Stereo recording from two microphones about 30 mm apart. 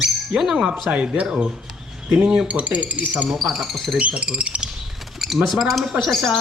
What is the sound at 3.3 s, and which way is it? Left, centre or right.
Speech, centre.